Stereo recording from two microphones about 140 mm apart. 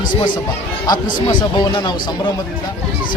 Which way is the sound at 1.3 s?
30° left (ahead or behind).